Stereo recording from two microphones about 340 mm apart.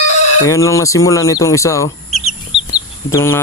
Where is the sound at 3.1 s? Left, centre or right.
Centre.